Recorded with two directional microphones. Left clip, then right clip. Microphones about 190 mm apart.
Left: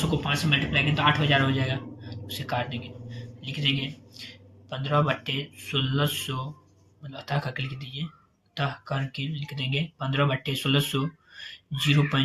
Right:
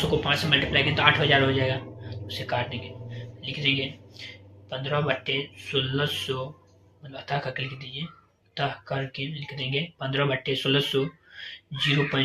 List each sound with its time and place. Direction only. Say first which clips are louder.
0.2 s speech: right 3 dB; 20° left (ahead or behind); by 12.2 s 35° left (ahead or behind)